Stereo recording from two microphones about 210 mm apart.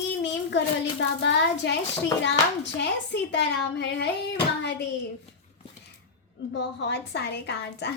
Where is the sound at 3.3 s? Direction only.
55° left (ahead or behind).